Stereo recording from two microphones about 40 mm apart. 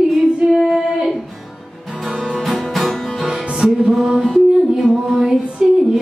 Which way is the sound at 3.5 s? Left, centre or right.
Centre.